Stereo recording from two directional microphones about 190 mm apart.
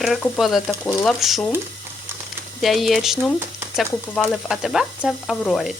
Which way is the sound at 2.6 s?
Centre (ahead or behind).